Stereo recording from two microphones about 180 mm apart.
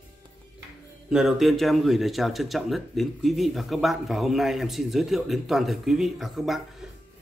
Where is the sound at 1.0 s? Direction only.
Centre (ahead or behind).